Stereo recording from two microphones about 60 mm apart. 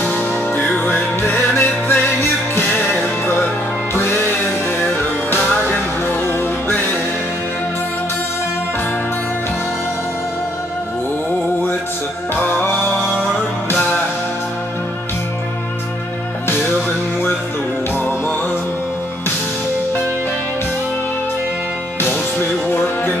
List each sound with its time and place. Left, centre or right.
0.1 s music: centre; by 3.3 s left
5.3 s music: left
12.5 s music: left